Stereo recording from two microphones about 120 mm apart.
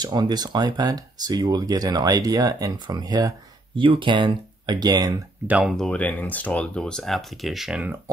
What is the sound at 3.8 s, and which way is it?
Speech, 45° right (ahead or behind).